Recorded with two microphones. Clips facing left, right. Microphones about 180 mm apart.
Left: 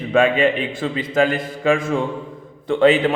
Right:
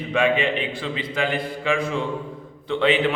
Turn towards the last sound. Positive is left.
turn(degrees=45)  # may be behind; listen again after turning